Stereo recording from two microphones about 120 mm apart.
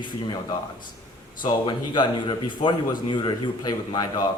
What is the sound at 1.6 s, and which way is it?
Speech, 40° left (ahead or behind).